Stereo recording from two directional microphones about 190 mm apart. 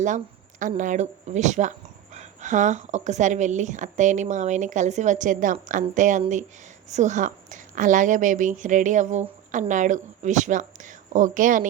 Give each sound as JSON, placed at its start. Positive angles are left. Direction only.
{"t": 0.6, "sound": "a woman's voice", "side_deg": -40}